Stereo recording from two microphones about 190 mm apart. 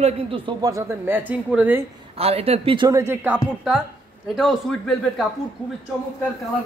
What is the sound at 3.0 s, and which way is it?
A man's voice, 10° right (ahead or behind).